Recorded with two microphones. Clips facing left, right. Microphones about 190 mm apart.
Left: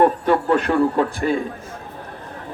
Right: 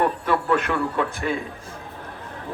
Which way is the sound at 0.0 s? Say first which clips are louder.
Left 6 dB; 35° left (ahead or behind).